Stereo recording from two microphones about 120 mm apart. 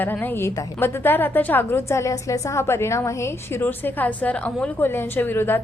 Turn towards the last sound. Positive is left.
turn(degrees=20)  # may be behind; listen again after turning